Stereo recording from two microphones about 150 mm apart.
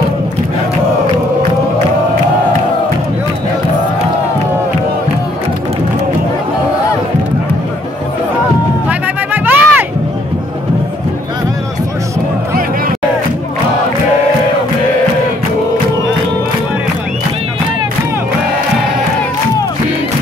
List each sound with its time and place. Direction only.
8.8 s music: 10° right (ahead or behind)